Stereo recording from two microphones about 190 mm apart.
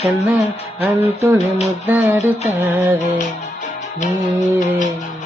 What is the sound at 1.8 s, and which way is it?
Music, 10° right (ahead or behind).